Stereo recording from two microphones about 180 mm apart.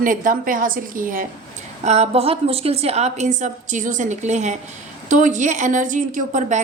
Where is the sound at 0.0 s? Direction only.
50° right (ahead or behind).